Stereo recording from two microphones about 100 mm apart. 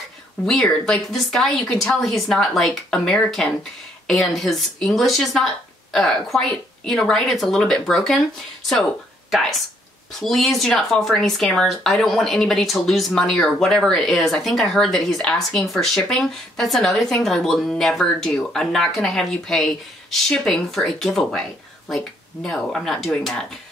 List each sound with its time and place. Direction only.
0.5 s speech: 5° left (ahead or behind)
9.3 s speech: centre (ahead or behind)